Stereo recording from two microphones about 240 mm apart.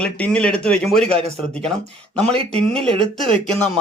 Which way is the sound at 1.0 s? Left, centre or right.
Right.